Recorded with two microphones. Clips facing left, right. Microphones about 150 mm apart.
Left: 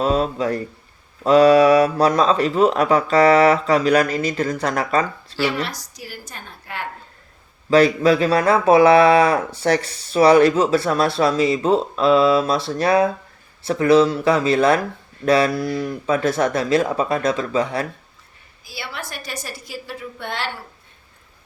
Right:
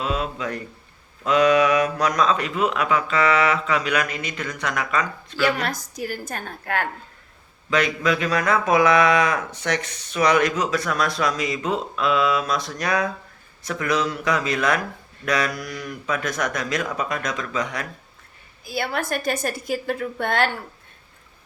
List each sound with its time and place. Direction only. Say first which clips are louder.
0.0 s speech: left 7 dB; 35° left (ahead or behind)
5.6 s a woman's voice: right 5 dB; 50° right (ahead or behind)
7.7 s speech: left 8 dB; 35° left (ahead or behind)
18.6 s a woman's voice: right 7 dB; 50° right (ahead or behind)